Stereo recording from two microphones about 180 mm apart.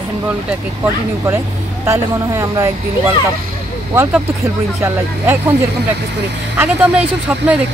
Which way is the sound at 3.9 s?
15° right (ahead or behind).